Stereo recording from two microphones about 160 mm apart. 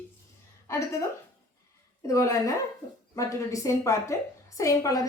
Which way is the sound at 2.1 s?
20° left (ahead or behind).